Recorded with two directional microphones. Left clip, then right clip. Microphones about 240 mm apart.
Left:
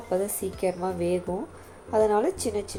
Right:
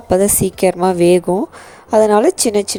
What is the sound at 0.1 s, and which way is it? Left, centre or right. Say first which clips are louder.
A woman's voice: right 14 dB; right.